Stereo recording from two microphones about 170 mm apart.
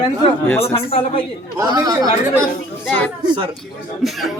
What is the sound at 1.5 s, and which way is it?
Speech, 20° right (ahead or behind).